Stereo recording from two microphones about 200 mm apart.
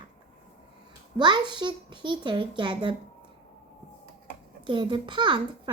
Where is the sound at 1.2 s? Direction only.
20° right (ahead or behind).